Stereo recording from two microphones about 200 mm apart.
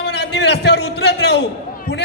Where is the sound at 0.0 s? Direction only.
55° left (ahead or behind).